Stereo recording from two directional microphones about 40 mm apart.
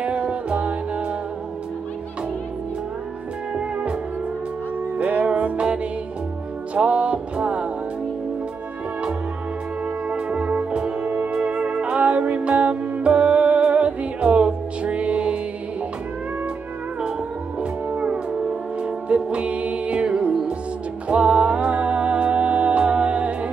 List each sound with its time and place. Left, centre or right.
0.0 s music: right
4.9 s music: right
10.0 s music: right
17.9 s music: right